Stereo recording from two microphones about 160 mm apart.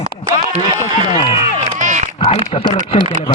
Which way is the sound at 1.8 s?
45° right (ahead or behind).